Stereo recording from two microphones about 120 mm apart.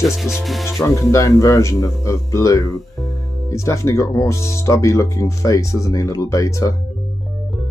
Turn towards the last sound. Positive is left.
turn(degrees=30)  # may be behind; listen again after turning